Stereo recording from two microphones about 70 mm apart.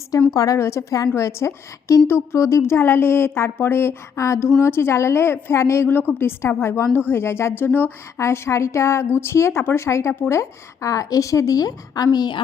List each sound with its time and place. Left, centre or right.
0.3 s a woman's voice: left
8.2 s a woman's voice: left
12.1 s a woman's voice: left